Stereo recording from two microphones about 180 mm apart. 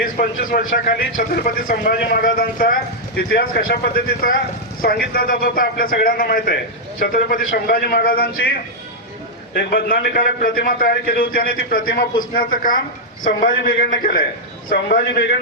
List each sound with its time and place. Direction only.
0.0 s a man's voice: 55° left (ahead or behind)
9.6 s a man's voice: 60° left (ahead or behind)